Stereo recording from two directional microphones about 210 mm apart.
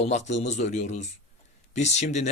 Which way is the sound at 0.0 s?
35° left (ahead or behind).